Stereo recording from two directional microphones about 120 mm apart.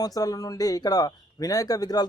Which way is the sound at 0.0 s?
30° left (ahead or behind).